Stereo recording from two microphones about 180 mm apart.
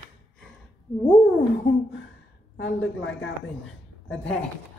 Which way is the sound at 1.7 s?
90° left.